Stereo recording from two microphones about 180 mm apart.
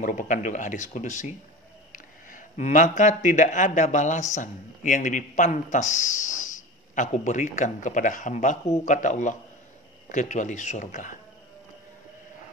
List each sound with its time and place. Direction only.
0.0 s speech: 45° left (ahead or behind)